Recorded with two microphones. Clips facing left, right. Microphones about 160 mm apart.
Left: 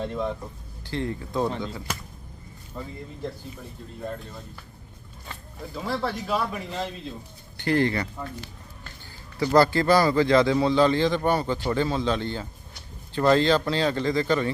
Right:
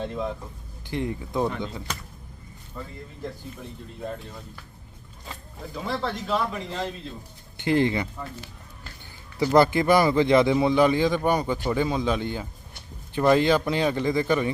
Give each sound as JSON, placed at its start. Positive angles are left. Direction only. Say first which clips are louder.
{"t": 0.0, "sound": "speech", "louder": "left 1 dB", "side_deg": 0}
{"t": 0.9, "sound": "speech", "louder": "right 1 dB", "side_deg": -15}
{"t": 2.8, "sound": "speech", "louder": "left 2 dB", "side_deg": 15}
{"t": 5.7, "sound": "speech", "louder": "left 1 dB", "side_deg": 5}
{"t": 7.5, "sound": "speech", "louder": "right 1 dB", "side_deg": -20}
{"t": 9.4, "sound": "speech", "louder": "right 1 dB", "side_deg": -15}